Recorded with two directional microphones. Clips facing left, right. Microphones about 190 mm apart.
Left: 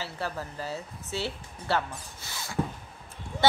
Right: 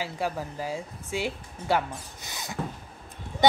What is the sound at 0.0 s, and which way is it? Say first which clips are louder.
Speech: right 4 dB; 15° right (ahead or behind).